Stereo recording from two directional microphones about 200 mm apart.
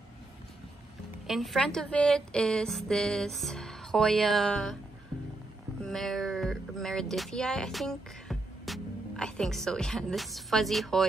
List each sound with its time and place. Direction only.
1.2 s a woman's voice: centre (ahead or behind)
5.9 s speech: centre (ahead or behind)